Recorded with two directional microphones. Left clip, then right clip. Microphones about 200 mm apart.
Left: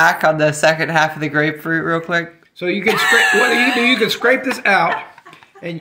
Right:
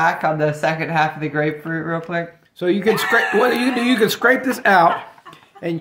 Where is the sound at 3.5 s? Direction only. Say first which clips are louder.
Left 5 dB; 50° right (ahead or behind).